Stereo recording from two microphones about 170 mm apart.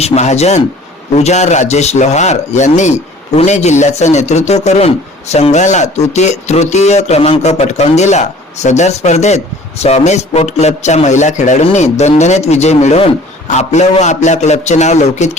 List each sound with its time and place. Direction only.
0.0 s speech: 40° left (ahead or behind)